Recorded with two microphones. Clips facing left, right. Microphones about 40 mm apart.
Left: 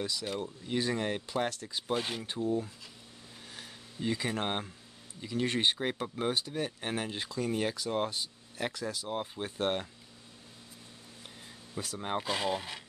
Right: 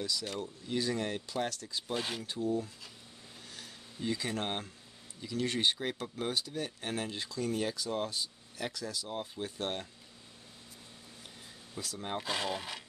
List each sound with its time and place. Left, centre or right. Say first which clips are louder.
0.2 s speech: left 3 dB; centre
2.0 s speech: right 1 dB; centre
2.2 s speech: left 1 dB; left
3.4 s a sound: left 2 dB; left
5.2 s speech: left 2 dB; left
12.0 s speech: left 4 dB; left
12.3 s speech: left 1 dB; centre